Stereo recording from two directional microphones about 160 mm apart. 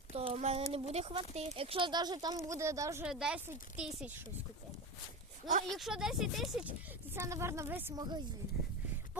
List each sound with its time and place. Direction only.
0.1 s speech: 40° right (ahead or behind); by 3.1 s 20° right (ahead or behind)
3.1 s speech: 5° right (ahead or behind)
5.6 s speech: centre (ahead or behind)
7.1 s speech: 15° right (ahead or behind)
7.9 s speech: 25° right (ahead or behind)